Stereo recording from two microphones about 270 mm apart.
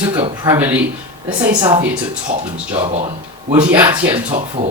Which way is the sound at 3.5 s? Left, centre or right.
Centre.